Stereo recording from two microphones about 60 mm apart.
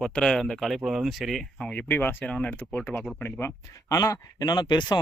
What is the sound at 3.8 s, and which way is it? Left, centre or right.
Speech, left.